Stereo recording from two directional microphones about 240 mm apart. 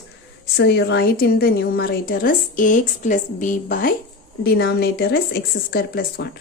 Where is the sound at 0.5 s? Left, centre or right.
Left.